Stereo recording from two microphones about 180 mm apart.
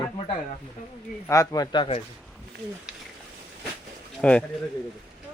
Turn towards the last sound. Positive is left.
turn(degrees=5)  # may be behind; listen again after turning